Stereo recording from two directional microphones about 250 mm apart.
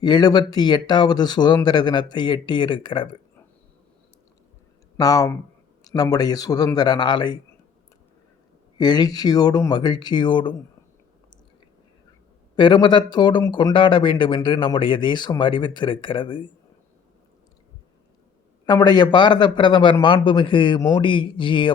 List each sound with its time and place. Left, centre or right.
0.0 s speech: centre
4.9 s speech: centre
8.8 s speech: centre
12.5 s speech: centre
18.6 s speech: centre